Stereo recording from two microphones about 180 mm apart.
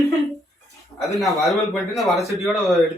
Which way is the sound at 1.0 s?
Centre (ahead or behind).